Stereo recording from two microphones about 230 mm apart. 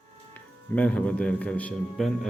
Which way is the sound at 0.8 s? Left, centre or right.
Centre.